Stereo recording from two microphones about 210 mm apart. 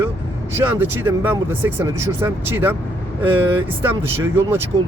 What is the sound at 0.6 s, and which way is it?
Speech, 10° right (ahead or behind).